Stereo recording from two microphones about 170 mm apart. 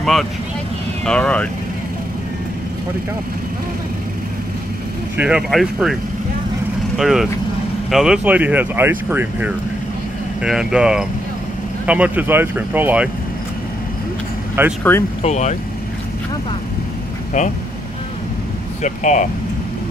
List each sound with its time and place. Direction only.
0.0 s speech: centre (ahead or behind)
5.1 s speech: 5° right (ahead or behind)
7.0 s speech: centre (ahead or behind)
14.8 s speech: 15° left (ahead or behind)
15.2 s speech: 45° left (ahead or behind)
18.8 s speech: 45° left (ahead or behind)